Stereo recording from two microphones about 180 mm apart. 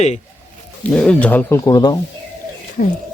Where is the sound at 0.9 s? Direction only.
5° left (ahead or behind); by 2.0 s 20° left (ahead or behind).